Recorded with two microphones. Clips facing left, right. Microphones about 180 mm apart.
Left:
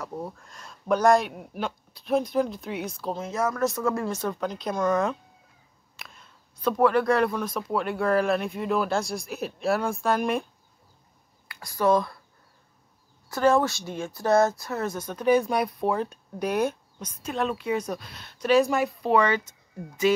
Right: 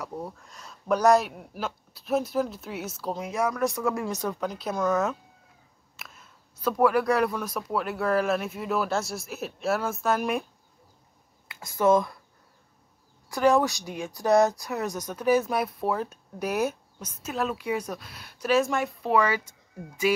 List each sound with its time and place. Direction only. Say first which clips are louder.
0.1 s speech: left 1 dB; centre (ahead or behind)
5.9 s a sound: even; 5° right (ahead or behind)
6.8 s speech: left 1 dB; 5° right (ahead or behind)
11.4 s speech: right 1 dB; 20° right (ahead or behind)
13.4 s speech: even; centre (ahead or behind)
13.7 s speech: left 1 dB; 15° right (ahead or behind)